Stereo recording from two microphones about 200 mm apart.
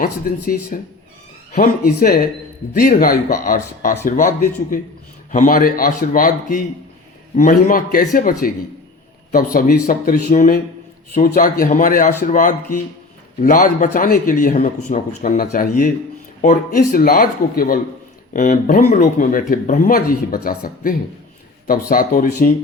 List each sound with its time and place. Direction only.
0.0 s speech: 45° left (ahead or behind)